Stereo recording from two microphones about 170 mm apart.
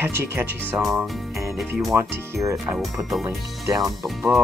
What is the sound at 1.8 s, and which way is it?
Speech, 15° right (ahead or behind).